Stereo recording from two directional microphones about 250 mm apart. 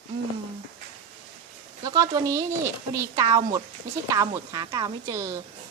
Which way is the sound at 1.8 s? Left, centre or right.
Centre.